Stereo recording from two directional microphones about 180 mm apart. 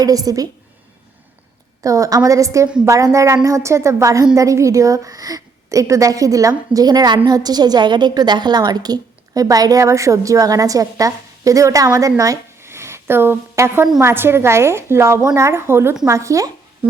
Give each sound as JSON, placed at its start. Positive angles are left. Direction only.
{"t": 0.0, "sound": "a woman's voice", "side_deg": -20}
{"t": 1.8, "sound": "a woman's voice", "side_deg": -20}